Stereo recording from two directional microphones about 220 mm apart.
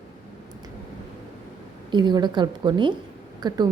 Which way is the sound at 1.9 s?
20° right (ahead or behind).